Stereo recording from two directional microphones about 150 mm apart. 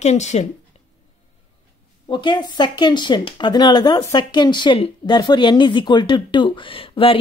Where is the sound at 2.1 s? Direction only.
30° left (ahead or behind).